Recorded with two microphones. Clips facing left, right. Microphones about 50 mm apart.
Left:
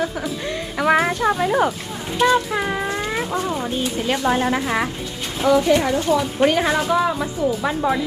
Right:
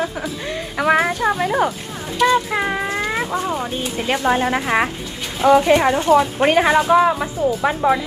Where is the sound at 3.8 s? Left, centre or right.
Right.